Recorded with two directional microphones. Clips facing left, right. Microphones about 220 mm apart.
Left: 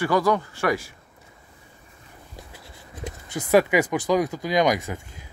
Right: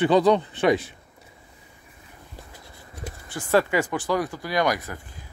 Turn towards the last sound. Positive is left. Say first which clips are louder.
# left 3 dB
turn(degrees=20)  # may be behind; listen again after turning